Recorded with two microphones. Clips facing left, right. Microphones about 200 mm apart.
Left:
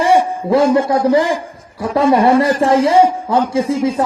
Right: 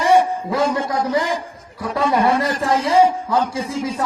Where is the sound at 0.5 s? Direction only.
30° left (ahead or behind).